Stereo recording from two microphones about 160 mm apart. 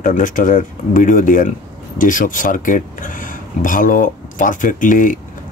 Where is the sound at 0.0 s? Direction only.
55° left (ahead or behind).